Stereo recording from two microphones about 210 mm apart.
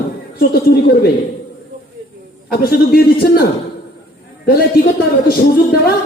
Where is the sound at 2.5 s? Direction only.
45° left (ahead or behind).